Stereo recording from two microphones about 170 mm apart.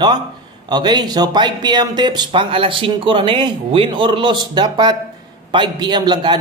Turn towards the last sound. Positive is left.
turn(degrees=-25)  # may be behind; listen again after turning